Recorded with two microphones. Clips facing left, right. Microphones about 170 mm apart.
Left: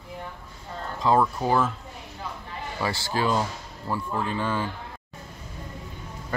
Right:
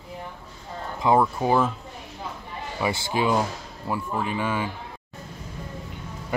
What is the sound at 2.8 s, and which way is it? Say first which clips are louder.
Speech: right 2 dB; 15° right (ahead or behind).